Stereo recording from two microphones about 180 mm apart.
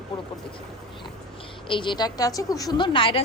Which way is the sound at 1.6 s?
25° left (ahead or behind).